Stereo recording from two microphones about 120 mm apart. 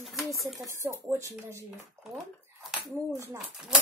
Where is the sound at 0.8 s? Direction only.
25° right (ahead or behind).